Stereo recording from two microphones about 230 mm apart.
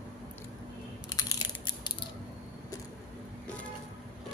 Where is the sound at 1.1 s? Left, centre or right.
Centre.